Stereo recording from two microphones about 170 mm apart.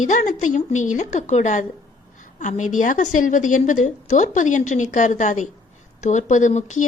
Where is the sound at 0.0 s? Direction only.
50° left (ahead or behind).